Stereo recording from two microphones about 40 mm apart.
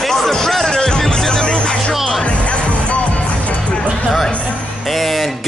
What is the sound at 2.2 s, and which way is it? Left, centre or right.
Music, left.